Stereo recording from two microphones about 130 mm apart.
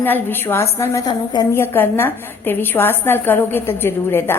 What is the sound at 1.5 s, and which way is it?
A woman's voice, 15° left (ahead or behind).